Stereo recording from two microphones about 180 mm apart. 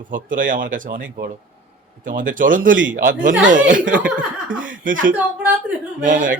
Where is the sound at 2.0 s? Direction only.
50° right (ahead or behind).